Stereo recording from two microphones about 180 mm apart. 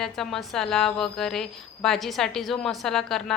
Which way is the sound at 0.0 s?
Centre (ahead or behind).